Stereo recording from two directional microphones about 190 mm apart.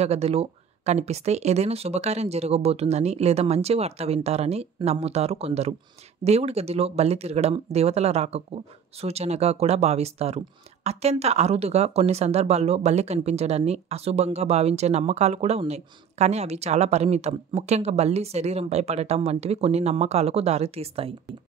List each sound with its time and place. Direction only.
0.0 s speech: 35° right (ahead or behind)